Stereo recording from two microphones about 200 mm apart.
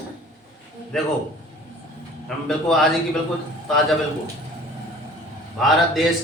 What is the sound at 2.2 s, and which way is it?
Speech, centre (ahead or behind).